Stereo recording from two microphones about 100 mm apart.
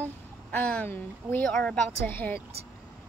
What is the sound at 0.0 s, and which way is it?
Speech, 15° left (ahead or behind).